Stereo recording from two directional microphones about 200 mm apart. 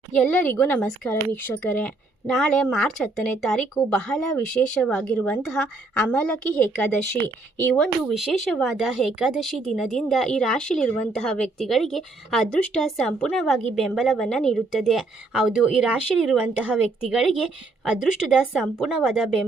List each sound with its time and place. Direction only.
0.2 s speech: 5° left (ahead or behind)